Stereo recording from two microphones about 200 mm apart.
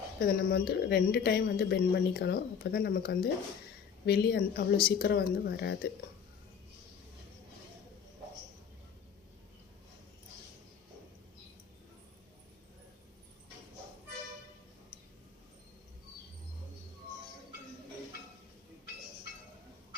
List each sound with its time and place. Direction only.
0.3 s speech: 50° left (ahead or behind)